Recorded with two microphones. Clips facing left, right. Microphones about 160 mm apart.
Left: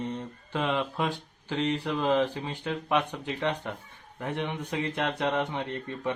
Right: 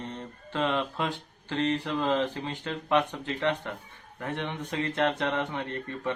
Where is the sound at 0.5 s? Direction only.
15° left (ahead or behind).